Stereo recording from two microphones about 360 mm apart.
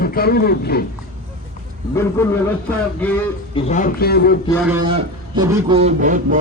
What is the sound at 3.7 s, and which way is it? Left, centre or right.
Speech, left.